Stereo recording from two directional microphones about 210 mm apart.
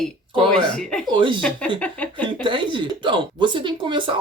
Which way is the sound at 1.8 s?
5° left (ahead or behind).